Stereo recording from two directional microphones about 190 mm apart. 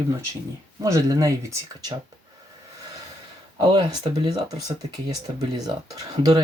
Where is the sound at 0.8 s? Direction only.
20° right (ahead or behind).